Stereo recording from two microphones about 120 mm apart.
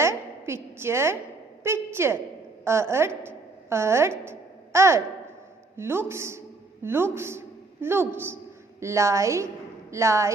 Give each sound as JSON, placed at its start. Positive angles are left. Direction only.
{"t": 0.0, "sound": "a woman's voice", "side_deg": -20}
{"t": 4.3, "sound": "a sound", "side_deg": -20}
{"t": 5.7, "sound": "speech", "side_deg": -20}